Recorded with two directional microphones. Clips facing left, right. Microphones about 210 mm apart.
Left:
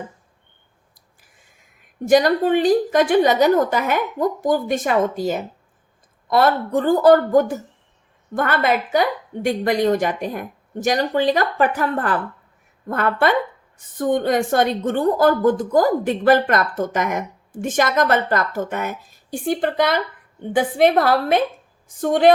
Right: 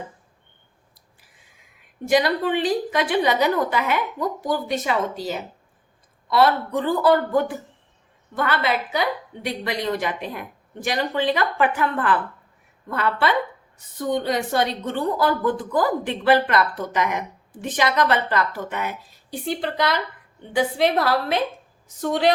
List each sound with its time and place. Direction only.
2.0 s a woman's voice: 45° left (ahead or behind)